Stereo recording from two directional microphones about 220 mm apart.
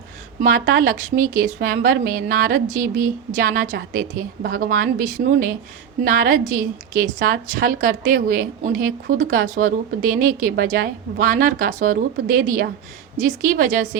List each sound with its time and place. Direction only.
0.4 s a woman's voice: 40° right (ahead or behind)